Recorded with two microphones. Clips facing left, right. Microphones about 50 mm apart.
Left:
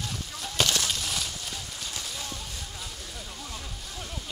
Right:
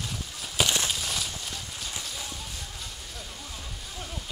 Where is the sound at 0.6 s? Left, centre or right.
Centre.